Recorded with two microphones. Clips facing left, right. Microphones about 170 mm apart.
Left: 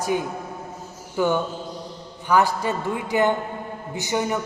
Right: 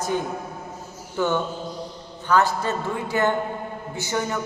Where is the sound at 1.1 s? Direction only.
10° left (ahead or behind).